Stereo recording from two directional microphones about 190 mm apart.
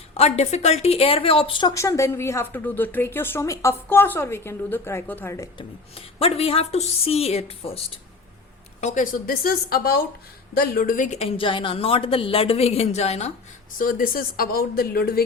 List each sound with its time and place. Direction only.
0.2 s a woman's voice: 35° left (ahead or behind); by 5.6 s 15° left (ahead or behind)
6.1 s speech: 30° left (ahead or behind)
8.8 s speech: 40° left (ahead or behind)
13.7 s speech: 45° left (ahead or behind)